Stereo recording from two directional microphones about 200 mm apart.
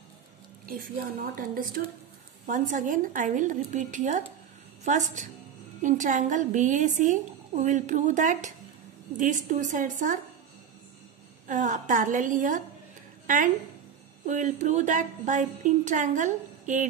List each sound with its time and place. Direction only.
1.3 s a woman's voice: 45° right (ahead or behind)
11.4 s a woman's voice: 40° right (ahead or behind)